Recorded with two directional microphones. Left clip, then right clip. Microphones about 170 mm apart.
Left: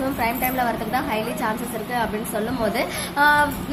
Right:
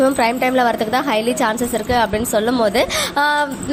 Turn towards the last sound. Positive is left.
turn(degrees=-45)  # may be behind; listen again after turning